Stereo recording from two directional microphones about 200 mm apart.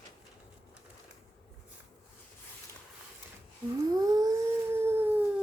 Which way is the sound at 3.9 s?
20° right (ahead or behind).